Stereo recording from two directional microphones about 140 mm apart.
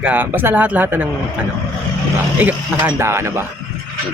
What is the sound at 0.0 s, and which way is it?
A man's voice, 10° right (ahead or behind).